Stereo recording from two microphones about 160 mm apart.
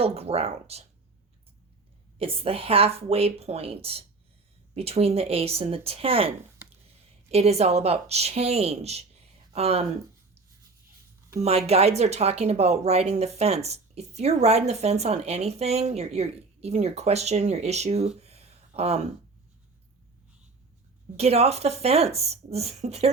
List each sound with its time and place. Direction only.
0.0 s a woman's voice: 40° right (ahead or behind)
2.1 s a woman's voice: 35° right (ahead or behind)
11.4 s speech: 40° right (ahead or behind)
18.2 s a sound: 40° right (ahead or behind)
21.2 s a woman's voice: 40° right (ahead or behind)